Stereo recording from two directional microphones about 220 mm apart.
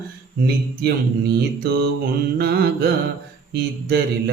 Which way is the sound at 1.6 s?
45° right (ahead or behind).